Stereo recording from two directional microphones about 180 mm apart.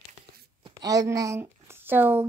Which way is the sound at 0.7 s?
20° right (ahead or behind).